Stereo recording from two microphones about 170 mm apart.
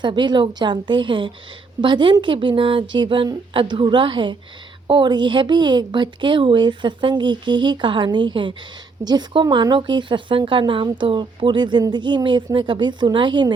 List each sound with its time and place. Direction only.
0.0 s a woman's voice: 25° right (ahead or behind)